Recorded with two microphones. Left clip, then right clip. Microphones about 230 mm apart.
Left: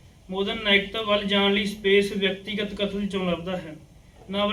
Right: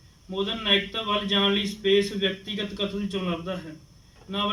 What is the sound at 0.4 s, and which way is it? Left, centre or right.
A man's voice, centre.